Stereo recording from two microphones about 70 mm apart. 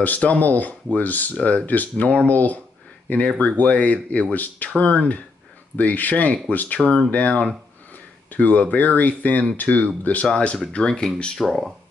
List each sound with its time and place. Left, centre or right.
0.0 s speech: left; by 11.7 s centre